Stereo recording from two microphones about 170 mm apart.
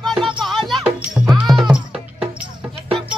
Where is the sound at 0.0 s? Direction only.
Centre (ahead or behind).